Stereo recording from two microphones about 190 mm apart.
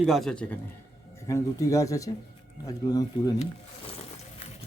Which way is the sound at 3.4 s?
35° left (ahead or behind).